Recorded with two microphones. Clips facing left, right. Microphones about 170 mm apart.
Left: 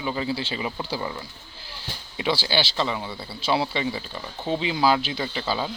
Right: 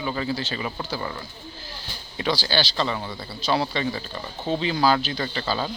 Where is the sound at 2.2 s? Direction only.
15° left (ahead or behind).